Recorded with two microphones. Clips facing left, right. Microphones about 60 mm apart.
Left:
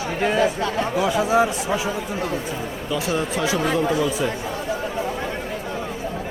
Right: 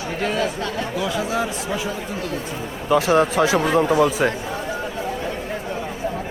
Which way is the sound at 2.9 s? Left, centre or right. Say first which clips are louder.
Right 8 dB; right.